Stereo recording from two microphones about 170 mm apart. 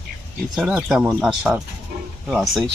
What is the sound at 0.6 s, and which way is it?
Speech, 5° right (ahead or behind).